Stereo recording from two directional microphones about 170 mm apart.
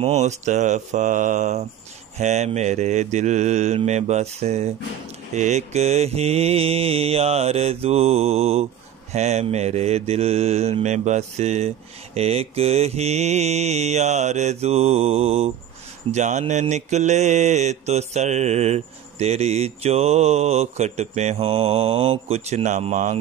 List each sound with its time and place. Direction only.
0.0 s mantra: 40° right (ahead or behind)